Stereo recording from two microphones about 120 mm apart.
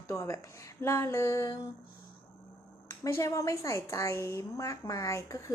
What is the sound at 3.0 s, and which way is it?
A woman's voice, 25° left (ahead or behind).